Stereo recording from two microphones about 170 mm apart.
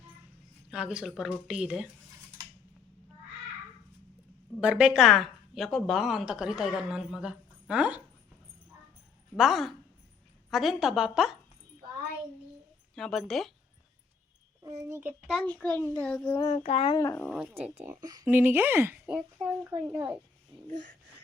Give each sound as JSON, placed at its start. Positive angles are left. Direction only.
{"t": 0.7, "sound": "a woman's voice", "side_deg": -5}
{"t": 4.6, "sound": "a woman's voice", "side_deg": -5}
{"t": 9.3, "sound": "a woman's voice", "side_deg": 0}
{"t": 13.0, "sound": "a woman's voice", "side_deg": 0}
{"t": 14.6, "sound": "a child's voice", "side_deg": -20}
{"t": 15.3, "sound": "a child's voice", "side_deg": 5}
{"t": 16.4, "sound": "speech", "side_deg": 30}
{"t": 17.2, "sound": "a woman's voice", "side_deg": -5}
{"t": 17.8, "sound": "a child's voice", "side_deg": -20}
{"t": 20.5, "sound": "speech", "side_deg": -30}